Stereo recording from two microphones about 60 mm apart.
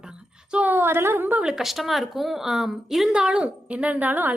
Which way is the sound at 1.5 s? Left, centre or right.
Centre.